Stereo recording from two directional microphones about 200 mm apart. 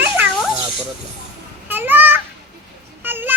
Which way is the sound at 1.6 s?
10° right (ahead or behind).